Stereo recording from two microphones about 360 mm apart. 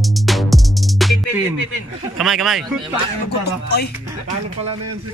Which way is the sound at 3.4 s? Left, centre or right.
Left.